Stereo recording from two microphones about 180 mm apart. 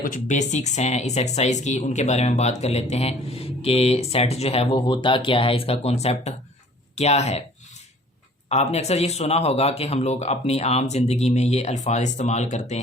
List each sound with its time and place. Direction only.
0.0 s speech: 45° left (ahead or behind)
8.4 s speech: 35° left (ahead or behind)